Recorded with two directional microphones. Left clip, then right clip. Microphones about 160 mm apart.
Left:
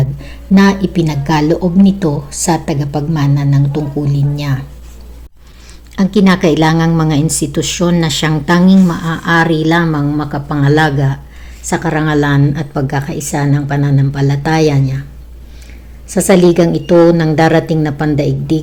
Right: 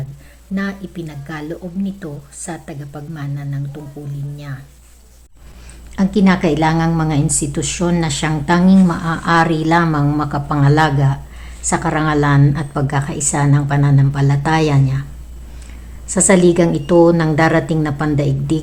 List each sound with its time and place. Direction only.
0.2 s a woman's voice: 10° left (ahead or behind)
6.2 s a woman's voice: 25° left (ahead or behind)
16.0 s a woman's voice: 10° left (ahead or behind)